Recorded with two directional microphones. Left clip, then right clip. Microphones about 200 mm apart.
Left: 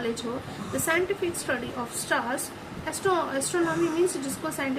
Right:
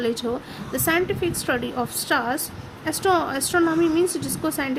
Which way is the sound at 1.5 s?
60° right (ahead or behind).